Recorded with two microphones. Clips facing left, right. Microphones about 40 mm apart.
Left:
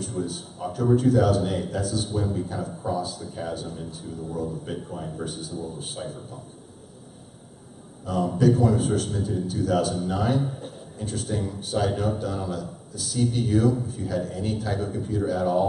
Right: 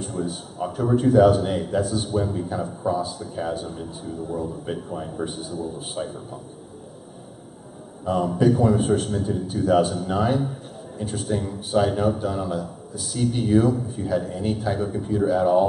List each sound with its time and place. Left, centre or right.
0.0 s a sound: centre
0.7 s a man's voice: centre
5.5 s a man's voice: centre
8.4 s a man's voice: centre
9.5 s a man's voice: right
10.4 s a man's voice: centre
11.0 s a man's voice: centre